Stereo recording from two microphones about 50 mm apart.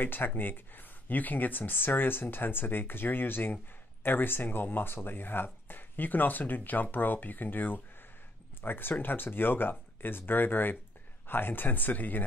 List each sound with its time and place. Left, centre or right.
0.0 s speech: left